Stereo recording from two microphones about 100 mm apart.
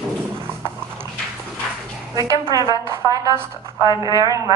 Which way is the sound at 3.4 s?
25° right (ahead or behind).